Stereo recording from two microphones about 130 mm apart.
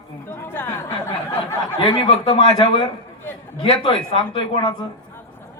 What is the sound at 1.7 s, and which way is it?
A man's voice, 40° left (ahead or behind).